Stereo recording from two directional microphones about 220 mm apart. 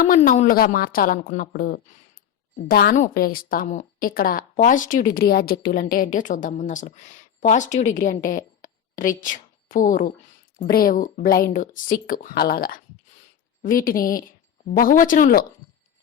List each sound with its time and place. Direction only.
0.0 s a woman's voice: 35° left (ahead or behind)